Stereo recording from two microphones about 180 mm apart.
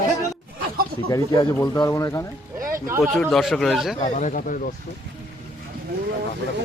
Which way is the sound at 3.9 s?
40° left (ahead or behind).